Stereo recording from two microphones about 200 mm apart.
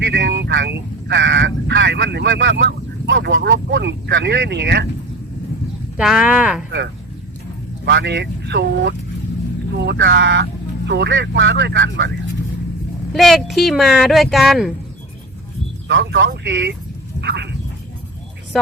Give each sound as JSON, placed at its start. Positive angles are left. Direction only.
{"t": 0.0, "sound": "vehicle", "side_deg": -60}
{"t": 6.0, "sound": "speech", "side_deg": -5}
{"t": 6.7, "sound": "speech", "side_deg": -60}
{"t": 13.1, "sound": "speech", "side_deg": 0}
{"t": 15.9, "sound": "speech", "side_deg": -65}
{"t": 17.2, "sound": "a sound", "side_deg": -60}